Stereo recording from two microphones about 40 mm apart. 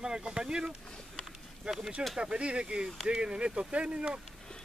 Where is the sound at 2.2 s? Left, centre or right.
Right.